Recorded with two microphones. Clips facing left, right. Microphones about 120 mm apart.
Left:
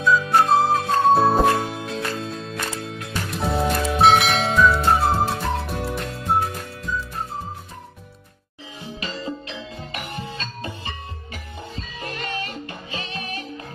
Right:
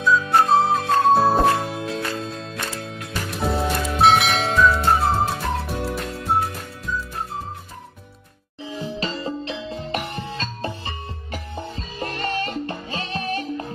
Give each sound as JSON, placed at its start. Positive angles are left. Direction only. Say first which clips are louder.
{"t": 0.0, "sound": "music", "louder": "even", "side_deg": 0}
{"t": 9.0, "sound": "music", "louder": "even", "side_deg": -30}